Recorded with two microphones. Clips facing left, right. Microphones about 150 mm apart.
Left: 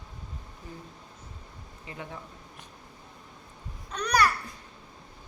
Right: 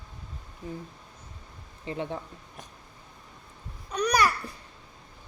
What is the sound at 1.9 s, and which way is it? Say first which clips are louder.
Speech: right 9 dB; 30° right (ahead or behind).